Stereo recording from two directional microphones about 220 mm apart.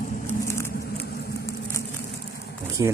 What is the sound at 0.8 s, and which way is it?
Vehicle, 45° left (ahead or behind).